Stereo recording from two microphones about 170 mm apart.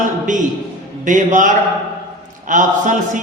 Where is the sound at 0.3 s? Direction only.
50° right (ahead or behind).